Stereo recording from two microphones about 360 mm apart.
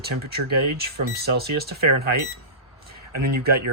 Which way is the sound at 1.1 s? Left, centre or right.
Right.